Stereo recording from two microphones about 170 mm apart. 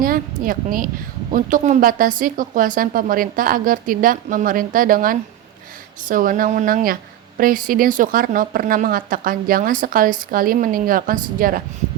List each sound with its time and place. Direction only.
0.0 s a woman's voice: 55° right (ahead or behind)